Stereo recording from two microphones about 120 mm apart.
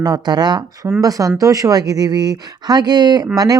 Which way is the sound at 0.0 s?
35° right (ahead or behind).